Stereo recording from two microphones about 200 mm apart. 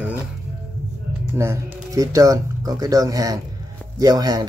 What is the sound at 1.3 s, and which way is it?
Speech, 15° right (ahead or behind).